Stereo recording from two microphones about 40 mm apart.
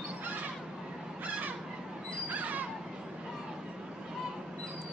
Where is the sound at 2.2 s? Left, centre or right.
Right.